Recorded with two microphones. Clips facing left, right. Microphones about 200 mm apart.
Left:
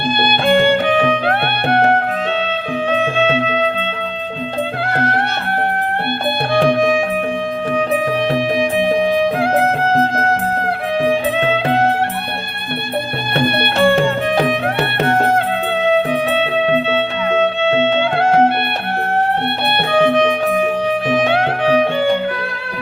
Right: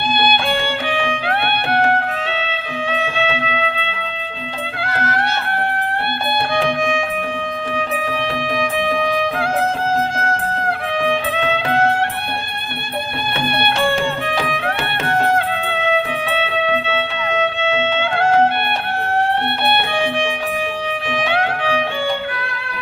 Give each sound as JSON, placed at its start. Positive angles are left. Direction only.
{"t": 0.2, "sound": "music", "side_deg": 60}
{"t": 0.9, "sound": "music", "side_deg": 40}
{"t": 1.7, "sound": "music", "side_deg": 25}
{"t": 2.5, "sound": "music", "side_deg": 40}
{"t": 4.9, "sound": "music", "side_deg": 55}
{"t": 6.6, "sound": "music", "side_deg": 40}
{"t": 11.0, "sound": "music", "side_deg": 35}
{"t": 13.3, "sound": "music", "side_deg": 60}
{"t": 14.0, "sound": "music", "side_deg": 40}
{"t": 16.3, "sound": "music", "side_deg": 40}
{"t": 19.9, "sound": "music", "side_deg": 40}